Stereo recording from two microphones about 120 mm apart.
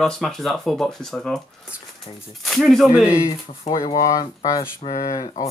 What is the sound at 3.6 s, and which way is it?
Speech, 55° left (ahead or behind).